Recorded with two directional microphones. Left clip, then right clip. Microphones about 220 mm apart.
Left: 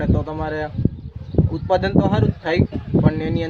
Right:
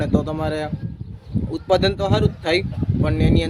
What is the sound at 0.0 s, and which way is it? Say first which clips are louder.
Speech: right 1 dB; 5° right (ahead or behind).